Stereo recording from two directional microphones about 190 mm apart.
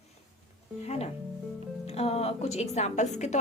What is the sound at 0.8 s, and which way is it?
A woman's voice, 35° left (ahead or behind).